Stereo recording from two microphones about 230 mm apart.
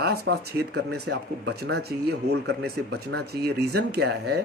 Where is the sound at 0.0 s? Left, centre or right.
Right.